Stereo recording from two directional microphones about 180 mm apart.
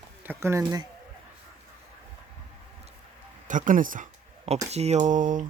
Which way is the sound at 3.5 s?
45° right (ahead or behind).